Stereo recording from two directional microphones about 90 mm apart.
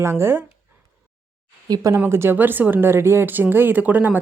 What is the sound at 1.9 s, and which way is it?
Speech, 25° right (ahead or behind).